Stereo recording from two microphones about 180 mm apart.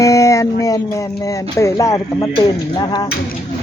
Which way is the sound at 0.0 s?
15° left (ahead or behind).